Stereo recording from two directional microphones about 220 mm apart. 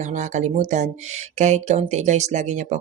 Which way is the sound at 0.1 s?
35° right (ahead or behind).